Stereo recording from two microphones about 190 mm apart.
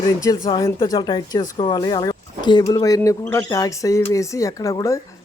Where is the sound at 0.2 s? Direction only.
20° left (ahead or behind).